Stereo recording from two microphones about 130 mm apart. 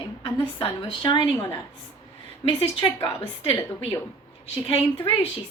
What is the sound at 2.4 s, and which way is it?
A woman's voice, 45° left (ahead or behind).